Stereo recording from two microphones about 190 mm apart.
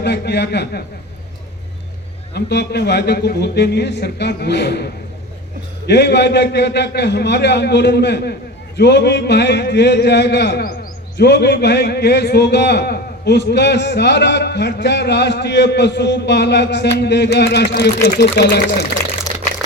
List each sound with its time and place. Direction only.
0.0 s a man's voice: 60° left (ahead or behind)
2.3 s a man's voice: 60° left (ahead or behind)